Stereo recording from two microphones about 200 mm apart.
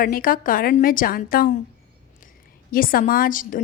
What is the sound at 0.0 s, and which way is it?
A woman's voice, 45° left (ahead or behind).